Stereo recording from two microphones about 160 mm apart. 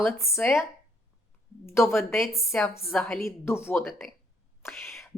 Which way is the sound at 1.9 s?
Centre (ahead or behind).